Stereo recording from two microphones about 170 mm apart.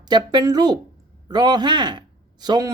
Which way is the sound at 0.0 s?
25° right (ahead or behind).